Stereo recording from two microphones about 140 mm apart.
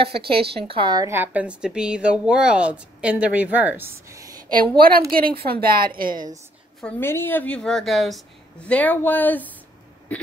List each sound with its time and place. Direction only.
0.3 s speech: 40° right (ahead or behind)
1.0 s speech: 15° right (ahead or behind)
4.6 s a woman's voice: 90° right
7.0 s a woman's voice: 15° left (ahead or behind); by 8.2 s centre (ahead or behind)
8.6 s a woman's voice: 10° left (ahead or behind)